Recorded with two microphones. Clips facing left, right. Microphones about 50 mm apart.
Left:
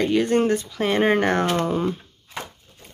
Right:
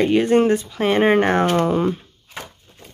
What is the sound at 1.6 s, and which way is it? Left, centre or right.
Speech, right.